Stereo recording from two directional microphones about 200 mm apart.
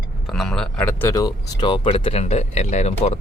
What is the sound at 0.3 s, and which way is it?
Speech, centre (ahead or behind).